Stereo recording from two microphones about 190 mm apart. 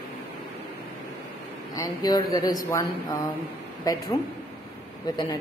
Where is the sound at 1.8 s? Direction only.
20° left (ahead or behind).